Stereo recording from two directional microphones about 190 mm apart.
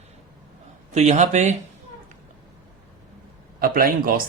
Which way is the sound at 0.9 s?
40° right (ahead or behind).